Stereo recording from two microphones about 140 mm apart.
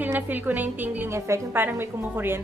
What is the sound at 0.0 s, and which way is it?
A woman's voice, 10° right (ahead or behind).